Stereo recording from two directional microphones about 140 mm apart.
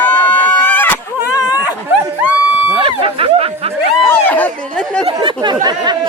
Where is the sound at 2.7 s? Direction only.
40° right (ahead or behind).